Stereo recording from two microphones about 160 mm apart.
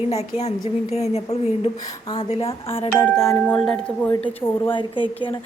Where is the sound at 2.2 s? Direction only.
35° left (ahead or behind).